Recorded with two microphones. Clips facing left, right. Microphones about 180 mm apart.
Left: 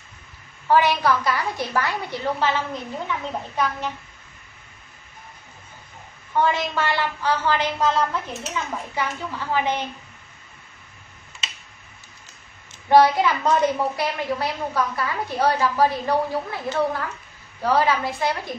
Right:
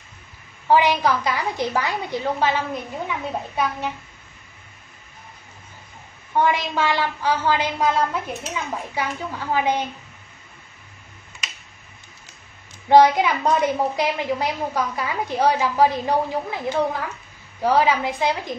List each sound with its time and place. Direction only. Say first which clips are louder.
0.7 s a woman's voice: right 1 dB; 15° right (ahead or behind)
6.3 s a woman's voice: right 1 dB; 15° right (ahead or behind)
12.9 s a woman's voice: right 2 dB; 15° right (ahead or behind)